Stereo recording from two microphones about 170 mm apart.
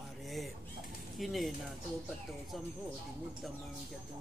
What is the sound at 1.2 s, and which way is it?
Speech, centre (ahead or behind).